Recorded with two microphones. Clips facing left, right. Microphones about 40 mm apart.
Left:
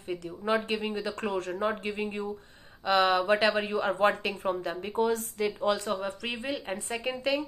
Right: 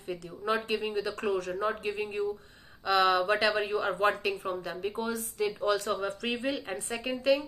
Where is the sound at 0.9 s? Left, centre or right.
Left.